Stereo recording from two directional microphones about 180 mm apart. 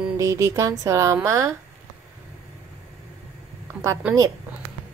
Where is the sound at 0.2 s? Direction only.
15° right (ahead or behind).